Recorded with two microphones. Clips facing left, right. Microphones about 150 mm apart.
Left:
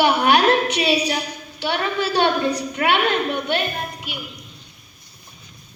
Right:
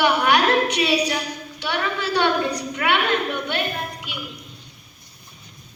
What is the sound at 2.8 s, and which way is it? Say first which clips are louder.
A woman's voice: left 1 dB; 20° left (ahead or behind).